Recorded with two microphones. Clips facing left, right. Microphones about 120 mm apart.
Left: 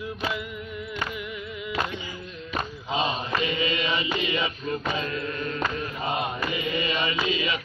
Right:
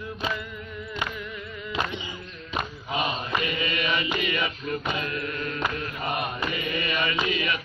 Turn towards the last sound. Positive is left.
turn(degrees=20)  # may be behind; listen again after turning